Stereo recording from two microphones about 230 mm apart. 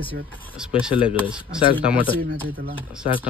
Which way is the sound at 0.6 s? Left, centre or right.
Centre.